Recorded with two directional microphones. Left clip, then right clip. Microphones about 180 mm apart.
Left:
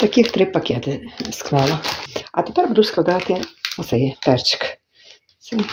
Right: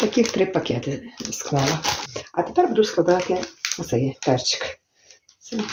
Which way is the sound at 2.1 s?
50° left (ahead or behind).